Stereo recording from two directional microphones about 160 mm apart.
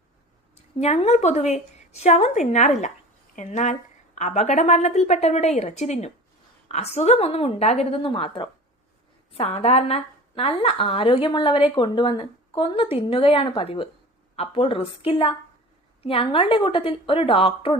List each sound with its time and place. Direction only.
0.5 s a woman's voice: 45° left (ahead or behind)